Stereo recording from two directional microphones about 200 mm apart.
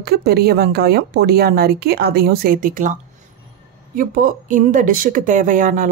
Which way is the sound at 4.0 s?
40° right (ahead or behind).